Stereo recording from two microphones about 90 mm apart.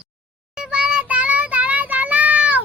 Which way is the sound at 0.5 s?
10° right (ahead or behind).